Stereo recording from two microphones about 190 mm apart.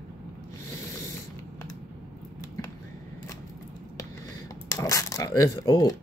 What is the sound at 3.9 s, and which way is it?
Speech, 15° left (ahead or behind).